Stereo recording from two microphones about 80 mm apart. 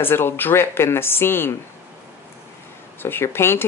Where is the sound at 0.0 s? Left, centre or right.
Left.